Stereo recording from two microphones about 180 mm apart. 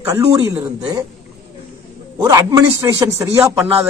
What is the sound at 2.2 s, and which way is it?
A man's voice, 20° right (ahead or behind).